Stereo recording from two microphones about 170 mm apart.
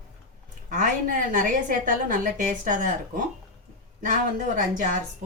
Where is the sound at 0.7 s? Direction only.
50° right (ahead or behind).